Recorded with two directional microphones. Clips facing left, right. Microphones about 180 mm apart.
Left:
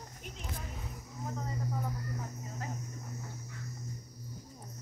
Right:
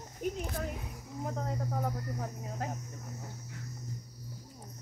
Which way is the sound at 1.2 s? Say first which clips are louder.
Right 3 dB; 60° right (ahead or behind).